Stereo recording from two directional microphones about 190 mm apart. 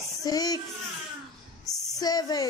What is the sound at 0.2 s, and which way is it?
Speech, 20° left (ahead or behind).